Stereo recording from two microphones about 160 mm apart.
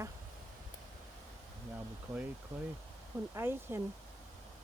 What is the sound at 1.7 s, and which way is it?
Speech, 10° right (ahead or behind).